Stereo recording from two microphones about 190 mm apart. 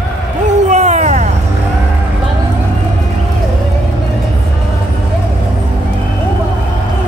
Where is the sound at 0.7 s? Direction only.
35° right (ahead or behind).